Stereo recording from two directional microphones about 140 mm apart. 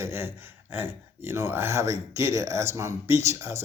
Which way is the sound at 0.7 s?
15° right (ahead or behind).